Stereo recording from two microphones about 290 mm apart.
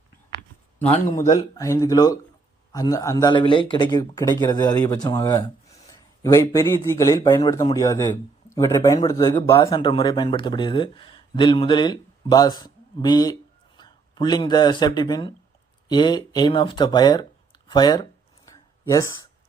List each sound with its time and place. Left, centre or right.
0.8 s speech: left
1.3 s a man's voice: centre
18.5 s a sound: centre